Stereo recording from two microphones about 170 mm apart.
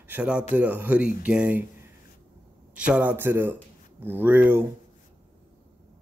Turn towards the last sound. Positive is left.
turn(degrees=-10)  # may be behind; listen again after turning